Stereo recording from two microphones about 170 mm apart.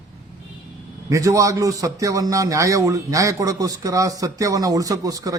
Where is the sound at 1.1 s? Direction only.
20° right (ahead or behind).